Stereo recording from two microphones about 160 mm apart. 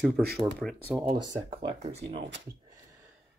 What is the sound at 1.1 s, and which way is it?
Speech, 35° right (ahead or behind).